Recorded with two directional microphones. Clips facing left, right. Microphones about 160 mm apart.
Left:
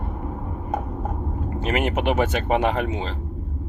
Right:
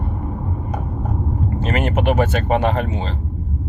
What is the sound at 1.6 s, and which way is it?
Speech, 15° left (ahead or behind).